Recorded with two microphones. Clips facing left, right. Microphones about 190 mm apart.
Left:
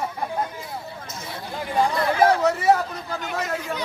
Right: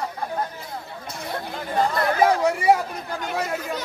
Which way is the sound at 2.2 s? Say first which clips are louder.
Even; 10° right (ahead or behind).